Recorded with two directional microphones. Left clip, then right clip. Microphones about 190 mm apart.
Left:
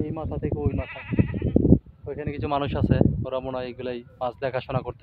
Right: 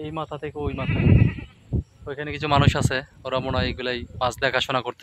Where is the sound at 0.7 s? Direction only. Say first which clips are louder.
Right 4 dB; 50° right (ahead or behind).